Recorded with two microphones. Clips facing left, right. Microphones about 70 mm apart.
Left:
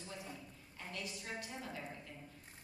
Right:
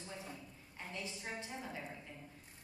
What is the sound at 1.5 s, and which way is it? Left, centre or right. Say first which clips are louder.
Speech: right 1 dB; centre.